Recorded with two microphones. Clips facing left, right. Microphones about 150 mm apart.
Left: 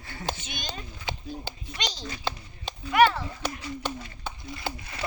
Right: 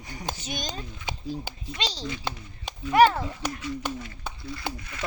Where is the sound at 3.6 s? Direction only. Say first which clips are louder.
Right 2 dB; 30° left (ahead or behind).